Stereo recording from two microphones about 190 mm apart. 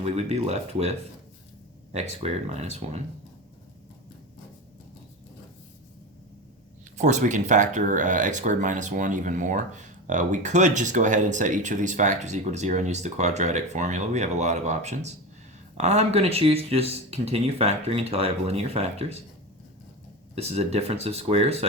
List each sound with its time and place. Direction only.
0.0 s speech: 35° right (ahead or behind)
6.9 s speech: 40° right (ahead or behind)
20.3 s speech: 35° right (ahead or behind)